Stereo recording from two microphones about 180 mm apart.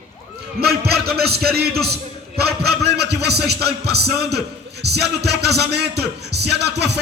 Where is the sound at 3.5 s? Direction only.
65° right (ahead or behind).